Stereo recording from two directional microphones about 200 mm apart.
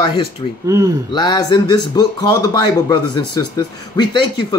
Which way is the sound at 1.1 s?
20° left (ahead or behind).